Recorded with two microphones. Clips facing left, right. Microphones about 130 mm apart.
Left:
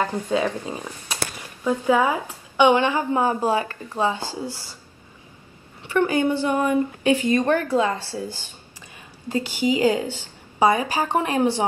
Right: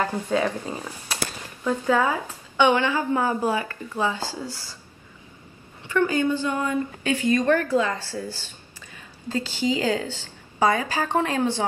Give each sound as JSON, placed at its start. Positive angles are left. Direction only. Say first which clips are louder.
{"t": 0.0, "sound": "a woman's voice", "louder": "left 1 dB", "side_deg": 15}
{"t": 3.4, "sound": "speech", "louder": "left 3 dB", "side_deg": 35}
{"t": 4.0, "sound": "a woman's voice", "louder": "left 3 dB", "side_deg": 15}
{"t": 5.9, "sound": "a woman's voice", "louder": "left 2 dB", "side_deg": 15}